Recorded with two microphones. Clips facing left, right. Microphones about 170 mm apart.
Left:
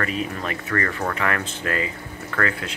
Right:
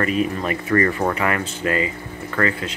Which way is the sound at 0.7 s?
20° right (ahead or behind).